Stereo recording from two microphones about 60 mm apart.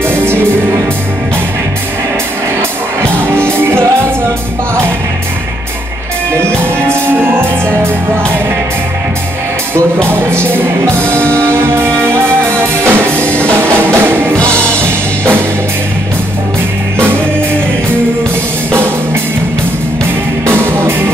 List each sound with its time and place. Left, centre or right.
0.0 s music: right
3.2 s music: right
6.3 s music: right
10.0 s music: right
20.4 s music: right